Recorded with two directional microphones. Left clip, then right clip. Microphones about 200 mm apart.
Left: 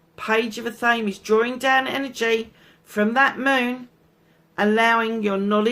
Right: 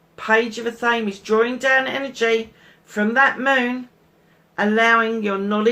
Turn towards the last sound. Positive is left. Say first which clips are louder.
# right 1 dB
turn(degrees=50)  # may be behind; listen again after turning